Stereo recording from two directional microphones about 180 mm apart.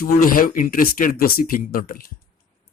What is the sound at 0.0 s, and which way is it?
Speech, 50° left (ahead or behind).